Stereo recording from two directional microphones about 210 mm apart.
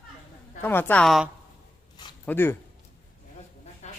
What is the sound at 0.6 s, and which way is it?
Speech, 10° left (ahead or behind).